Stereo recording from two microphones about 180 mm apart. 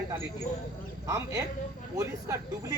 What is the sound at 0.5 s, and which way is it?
Speech, 45° left (ahead or behind).